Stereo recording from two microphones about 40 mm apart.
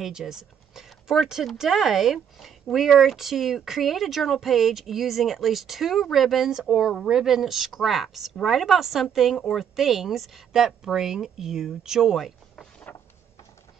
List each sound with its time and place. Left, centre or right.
0.0 s speech: centre
6.5 s speech: centre
12.9 s a sound: left